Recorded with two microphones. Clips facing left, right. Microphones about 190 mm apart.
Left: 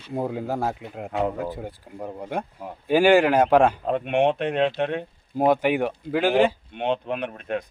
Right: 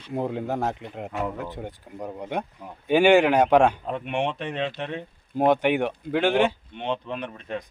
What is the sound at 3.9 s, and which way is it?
Speech, 60° left (ahead or behind).